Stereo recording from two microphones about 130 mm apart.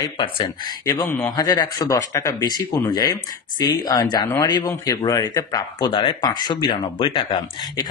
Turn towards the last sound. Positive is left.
turn(degrees=45)  # may be behind; listen again after turning